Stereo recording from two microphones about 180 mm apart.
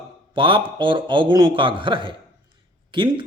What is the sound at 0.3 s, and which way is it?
A man's voice, 25° right (ahead or behind).